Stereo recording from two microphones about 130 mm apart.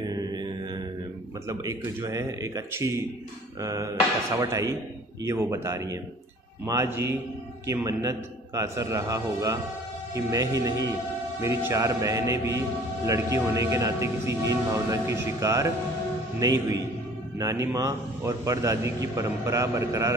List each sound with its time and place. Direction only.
0.1 s mantra: 35° right (ahead or behind)
1.5 s a man's voice: 25° right (ahead or behind)
17.4 s a man's voice: 25° right (ahead or behind)